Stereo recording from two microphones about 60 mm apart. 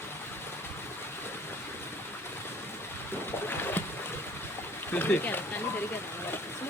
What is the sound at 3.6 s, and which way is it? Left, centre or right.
Boat, left.